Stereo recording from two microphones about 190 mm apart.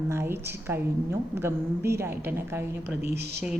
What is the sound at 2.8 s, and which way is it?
Speech, 60° right (ahead or behind).